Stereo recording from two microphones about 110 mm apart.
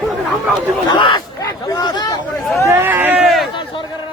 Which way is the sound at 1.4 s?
30° left (ahead or behind).